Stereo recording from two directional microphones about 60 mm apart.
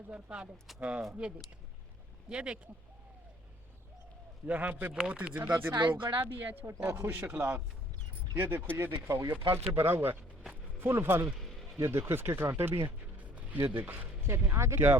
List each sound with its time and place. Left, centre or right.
0.1 s speech: centre
2.3 s speech: centre
4.4 s speech: right
5.5 s speech: right
8.7 s speech: right
10.5 s a sound: right
11.3 s vehicle: centre
11.8 s speech: right
13.1 s a sound: right
13.7 s speech: right